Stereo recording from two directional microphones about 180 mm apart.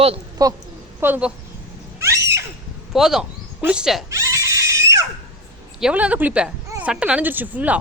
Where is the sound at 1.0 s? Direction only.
10° right (ahead or behind).